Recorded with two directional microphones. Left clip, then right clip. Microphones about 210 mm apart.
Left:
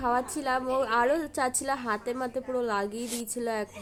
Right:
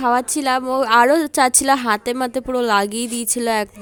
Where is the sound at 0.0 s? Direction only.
45° right (ahead or behind).